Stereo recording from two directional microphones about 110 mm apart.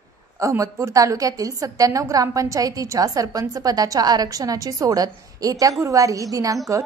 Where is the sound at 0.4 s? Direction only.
30° right (ahead or behind).